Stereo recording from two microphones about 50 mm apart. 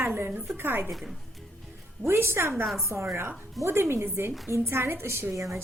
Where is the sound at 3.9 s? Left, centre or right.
Right.